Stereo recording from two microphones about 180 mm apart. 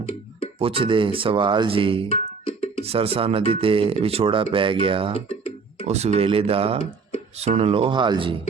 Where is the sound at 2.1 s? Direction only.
35° left (ahead or behind).